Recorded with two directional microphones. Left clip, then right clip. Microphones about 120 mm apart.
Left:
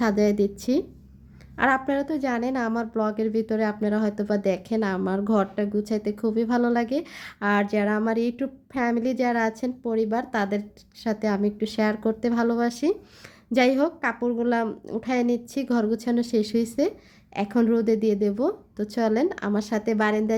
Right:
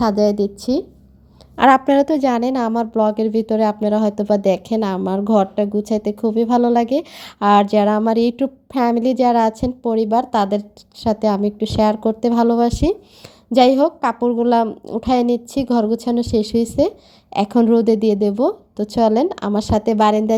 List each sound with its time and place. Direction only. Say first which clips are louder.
0.0 s speech: right 6 dB; 15° right (ahead or behind)
1.5 s speech: right 10 dB; 55° right (ahead or behind); by 16.9 s 30° right (ahead or behind)
17.3 s speech: right 8 dB; 45° right (ahead or behind)